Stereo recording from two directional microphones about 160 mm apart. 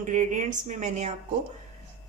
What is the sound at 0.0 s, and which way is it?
Speech, 50° right (ahead or behind).